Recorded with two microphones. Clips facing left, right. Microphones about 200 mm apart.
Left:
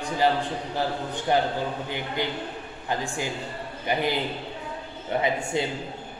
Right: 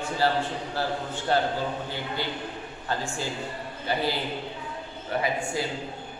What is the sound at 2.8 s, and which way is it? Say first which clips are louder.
A man's voice: left 2 dB; 15° left (ahead or behind).